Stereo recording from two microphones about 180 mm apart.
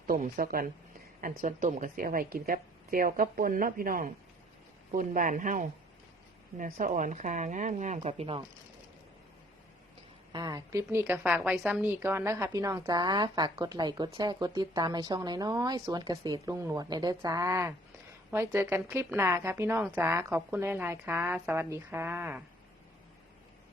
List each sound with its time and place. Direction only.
0.1 s speech: 50° right (ahead or behind); by 8.4 s 35° right (ahead or behind)
10.3 s a woman's voice: 20° right (ahead or behind)